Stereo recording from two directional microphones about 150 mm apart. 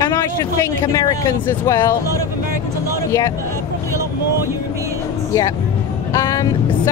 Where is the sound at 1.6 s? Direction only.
15° left (ahead or behind).